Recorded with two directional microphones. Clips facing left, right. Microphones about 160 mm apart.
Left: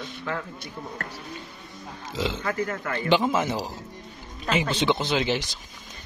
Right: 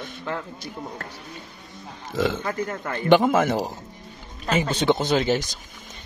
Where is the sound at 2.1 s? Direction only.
55° right (ahead or behind).